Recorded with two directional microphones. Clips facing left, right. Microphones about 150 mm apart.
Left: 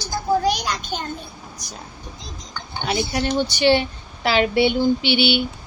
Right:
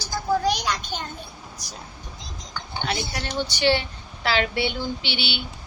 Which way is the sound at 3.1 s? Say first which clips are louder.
Left 7 dB; 15° left (ahead or behind).